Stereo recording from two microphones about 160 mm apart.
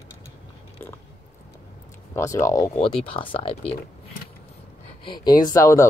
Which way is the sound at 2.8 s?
30° left (ahead or behind).